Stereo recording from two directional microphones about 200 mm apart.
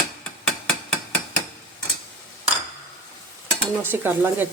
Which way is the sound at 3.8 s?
10° right (ahead or behind).